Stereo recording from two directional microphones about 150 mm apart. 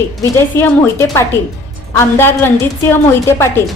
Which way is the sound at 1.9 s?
15° left (ahead or behind).